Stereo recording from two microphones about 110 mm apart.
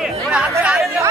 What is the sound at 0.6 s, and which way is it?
Chatter, 5° right (ahead or behind).